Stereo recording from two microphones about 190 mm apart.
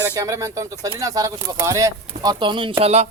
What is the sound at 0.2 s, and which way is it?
Speech, 15° right (ahead or behind).